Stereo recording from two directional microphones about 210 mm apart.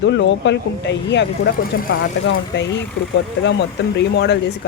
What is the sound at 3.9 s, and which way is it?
Speech, 55° left (ahead or behind).